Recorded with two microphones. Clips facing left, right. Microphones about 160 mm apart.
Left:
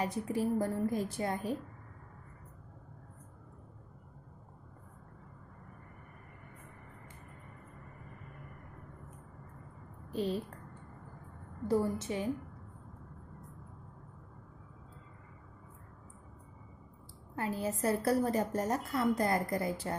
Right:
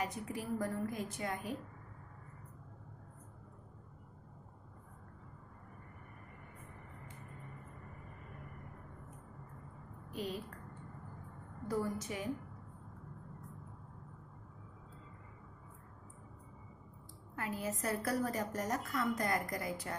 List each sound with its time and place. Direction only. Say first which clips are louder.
0.0 s a woman's voice: left 7 dB; 30° left (ahead or behind)
10.1 s a woman's voice: left 7 dB; 30° left (ahead or behind)
11.7 s a woman's voice: left 6 dB; 30° left (ahead or behind)
17.3 s a woman's voice: left 4 dB; 30° left (ahead or behind)